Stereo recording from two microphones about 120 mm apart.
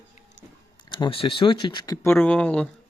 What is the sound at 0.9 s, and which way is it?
Speech, 40° left (ahead or behind).